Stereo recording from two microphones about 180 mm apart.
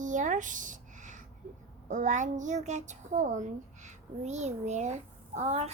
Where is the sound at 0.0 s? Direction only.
45° right (ahead or behind).